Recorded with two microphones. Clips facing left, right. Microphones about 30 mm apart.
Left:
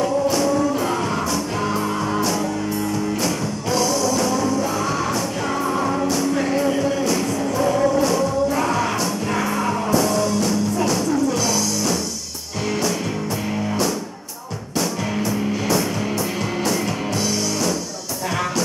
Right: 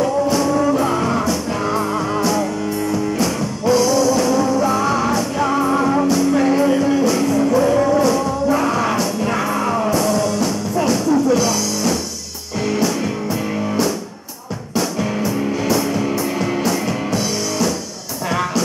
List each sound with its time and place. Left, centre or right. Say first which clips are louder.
0.0 s music: right 2 dB; centre
14.8 s music: right 3 dB; centre